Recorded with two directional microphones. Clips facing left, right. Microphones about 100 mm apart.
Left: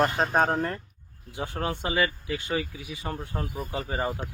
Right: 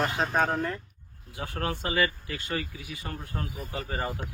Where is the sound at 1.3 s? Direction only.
25° left (ahead or behind).